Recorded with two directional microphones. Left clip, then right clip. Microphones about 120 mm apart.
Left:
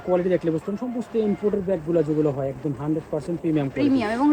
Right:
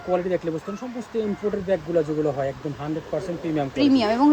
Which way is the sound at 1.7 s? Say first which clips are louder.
Right 3 dB; 55° left (ahead or behind).